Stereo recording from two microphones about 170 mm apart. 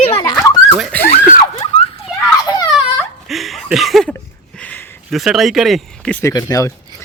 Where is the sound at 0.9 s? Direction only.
10° left (ahead or behind).